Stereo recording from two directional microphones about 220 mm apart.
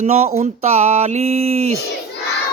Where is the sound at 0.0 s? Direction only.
30° right (ahead or behind).